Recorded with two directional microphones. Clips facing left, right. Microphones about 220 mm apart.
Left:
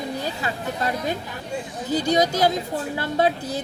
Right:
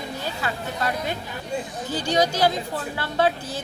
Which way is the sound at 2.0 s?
20° left (ahead or behind).